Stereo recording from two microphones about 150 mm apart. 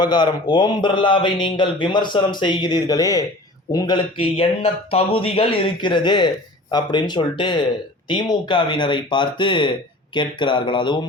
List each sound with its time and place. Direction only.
0.0 s speech: 30° left (ahead or behind)